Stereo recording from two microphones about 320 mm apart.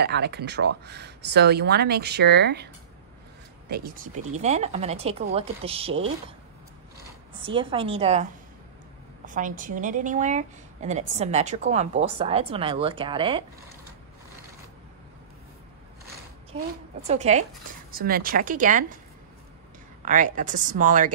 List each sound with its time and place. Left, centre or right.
0.0 s a woman's voice: right; by 13.4 s centre
17.1 s a woman's voice: right
20.0 s a woman's voice: right